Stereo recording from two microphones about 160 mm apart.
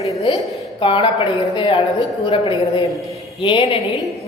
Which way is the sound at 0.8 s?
35° left (ahead or behind).